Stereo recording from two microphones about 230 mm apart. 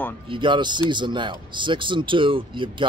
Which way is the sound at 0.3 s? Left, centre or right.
Right.